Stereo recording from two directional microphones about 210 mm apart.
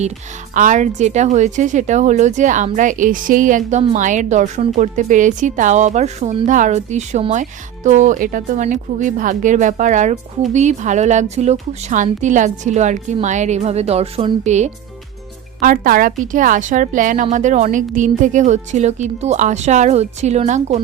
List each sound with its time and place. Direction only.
0.5 s a woman's voice: 35° right (ahead or behind)